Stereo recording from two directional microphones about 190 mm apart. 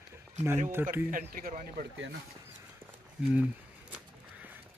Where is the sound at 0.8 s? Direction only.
10° right (ahead or behind).